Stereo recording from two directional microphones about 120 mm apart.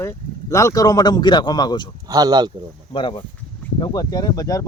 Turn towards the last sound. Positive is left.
turn(degrees=30)  # may be behind; listen again after turning